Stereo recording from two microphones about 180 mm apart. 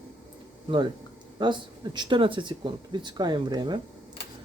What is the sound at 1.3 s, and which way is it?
Speech, 25° right (ahead or behind).